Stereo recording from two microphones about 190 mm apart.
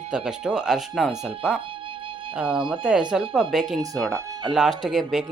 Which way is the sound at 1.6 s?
25° right (ahead or behind).